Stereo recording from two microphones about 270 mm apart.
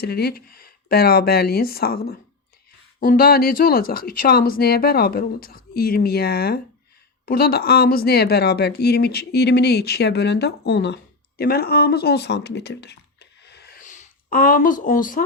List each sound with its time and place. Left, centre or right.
0.0 s a woman's voice: left